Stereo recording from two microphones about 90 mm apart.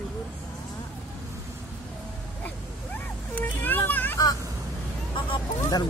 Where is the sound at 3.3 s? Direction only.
20° left (ahead or behind).